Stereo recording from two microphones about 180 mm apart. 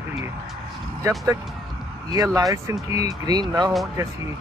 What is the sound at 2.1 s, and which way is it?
Speech, 20° right (ahead or behind).